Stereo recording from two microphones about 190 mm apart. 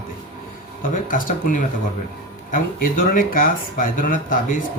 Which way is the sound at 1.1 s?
45° left (ahead or behind).